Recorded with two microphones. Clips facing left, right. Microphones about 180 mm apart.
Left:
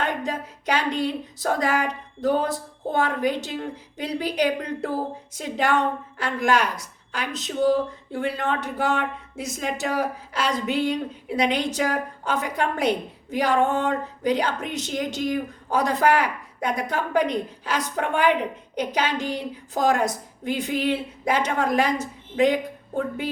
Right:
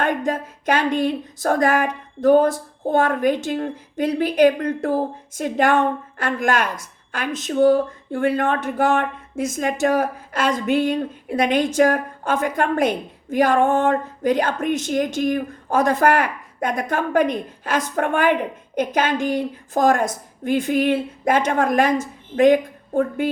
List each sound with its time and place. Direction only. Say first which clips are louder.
0.0 s a woman's voice: right 5 dB; 50° right (ahead or behind)